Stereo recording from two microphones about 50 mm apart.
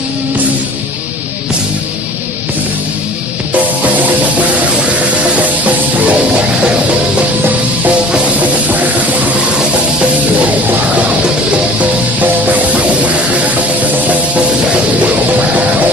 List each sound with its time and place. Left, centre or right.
3.5 s music: right
11.8 s music: right